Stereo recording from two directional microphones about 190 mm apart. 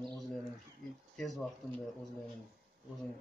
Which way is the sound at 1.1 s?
Centre (ahead or behind).